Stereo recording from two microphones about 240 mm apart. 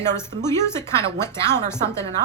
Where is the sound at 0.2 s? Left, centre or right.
Centre.